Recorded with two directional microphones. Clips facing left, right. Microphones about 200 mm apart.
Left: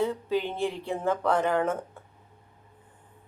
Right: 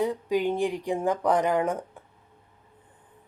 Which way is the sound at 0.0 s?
15° right (ahead or behind).